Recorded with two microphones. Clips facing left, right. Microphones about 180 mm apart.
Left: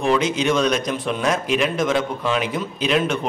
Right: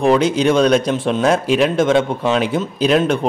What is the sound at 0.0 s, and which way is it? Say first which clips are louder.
Speech: right 6 dB; 35° right (ahead or behind).